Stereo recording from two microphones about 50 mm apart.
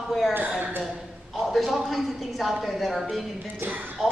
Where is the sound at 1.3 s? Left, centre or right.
Centre.